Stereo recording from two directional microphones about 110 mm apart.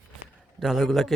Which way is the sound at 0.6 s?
Centre (ahead or behind).